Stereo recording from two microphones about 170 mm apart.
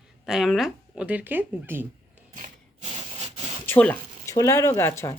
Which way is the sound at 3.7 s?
10° left (ahead or behind).